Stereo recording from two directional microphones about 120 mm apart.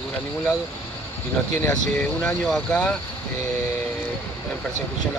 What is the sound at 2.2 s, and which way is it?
Speech, 10° left (ahead or behind).